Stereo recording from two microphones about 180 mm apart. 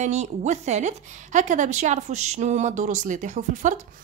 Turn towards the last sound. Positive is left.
turn(degrees=-45)  # may be behind; listen again after turning